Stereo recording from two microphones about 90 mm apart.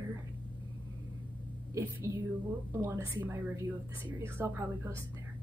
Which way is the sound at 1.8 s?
35° right (ahead or behind).